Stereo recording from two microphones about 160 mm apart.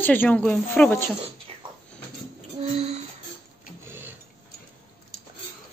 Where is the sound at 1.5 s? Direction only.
35° right (ahead or behind).